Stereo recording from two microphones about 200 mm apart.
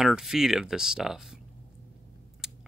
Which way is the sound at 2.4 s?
5° right (ahead or behind).